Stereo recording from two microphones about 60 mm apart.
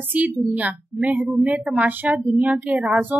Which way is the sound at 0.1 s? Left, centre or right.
Right.